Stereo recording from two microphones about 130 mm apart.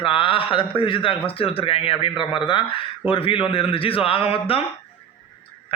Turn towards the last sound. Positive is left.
turn(degrees=45)  # may be behind; listen again after turning